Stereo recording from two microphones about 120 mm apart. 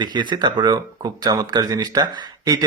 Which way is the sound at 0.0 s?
40° right (ahead or behind).